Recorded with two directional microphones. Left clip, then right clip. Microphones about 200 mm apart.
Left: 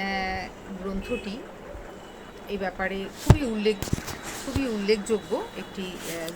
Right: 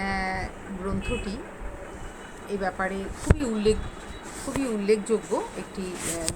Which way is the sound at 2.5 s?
Centre (ahead or behind).